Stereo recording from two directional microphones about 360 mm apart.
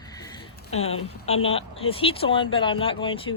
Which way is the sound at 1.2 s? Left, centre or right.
Centre.